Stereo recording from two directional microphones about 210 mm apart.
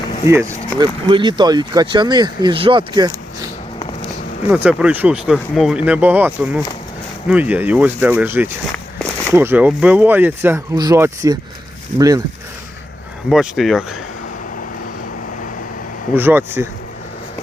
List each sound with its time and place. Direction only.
0.3 s speech: 15° right (ahead or behind)
4.5 s speech: 5° right (ahead or behind)
13.3 s speech: centre (ahead or behind)
16.1 s speech: 10° right (ahead or behind)